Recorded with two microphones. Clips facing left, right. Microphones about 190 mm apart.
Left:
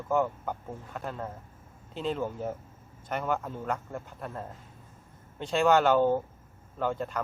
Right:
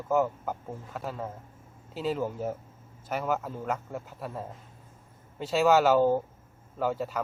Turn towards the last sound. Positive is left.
turn(degrees=-5)  # may be behind; listen again after turning